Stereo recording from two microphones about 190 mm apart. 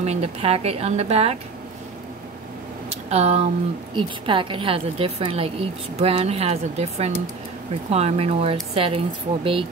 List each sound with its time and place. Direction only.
0.0 s speech: 35° right (ahead or behind)
2.9 s a sound: 35° right (ahead or behind)
3.9 s a woman's voice: 25° right (ahead or behind)